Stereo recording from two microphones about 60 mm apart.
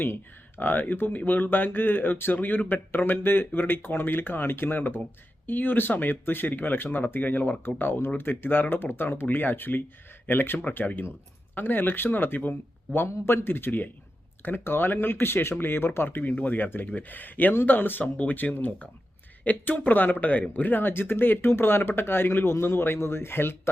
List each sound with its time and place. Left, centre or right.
0.0 s speech: left